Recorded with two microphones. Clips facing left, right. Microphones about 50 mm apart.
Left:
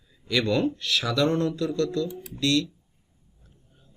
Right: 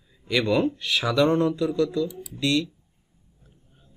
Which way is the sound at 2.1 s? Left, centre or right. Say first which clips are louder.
Left 1 dB; left.